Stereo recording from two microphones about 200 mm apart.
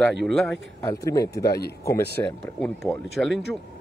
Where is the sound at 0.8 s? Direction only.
15° left (ahead or behind).